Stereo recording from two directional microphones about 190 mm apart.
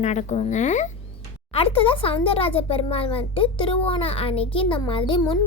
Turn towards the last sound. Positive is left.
turn(degrees=25)  # may be behind; listen again after turning